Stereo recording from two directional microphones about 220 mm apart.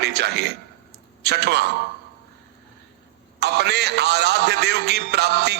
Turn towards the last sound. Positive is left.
turn(degrees=-50)  # may be behind; listen again after turning